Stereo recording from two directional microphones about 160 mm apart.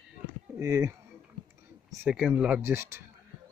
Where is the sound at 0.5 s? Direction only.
20° right (ahead or behind).